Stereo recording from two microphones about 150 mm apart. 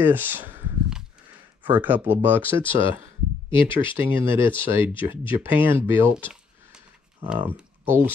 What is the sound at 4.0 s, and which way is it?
Speech, 15° right (ahead or behind).